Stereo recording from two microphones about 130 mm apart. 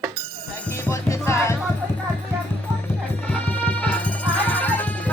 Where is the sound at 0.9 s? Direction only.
20° left (ahead or behind).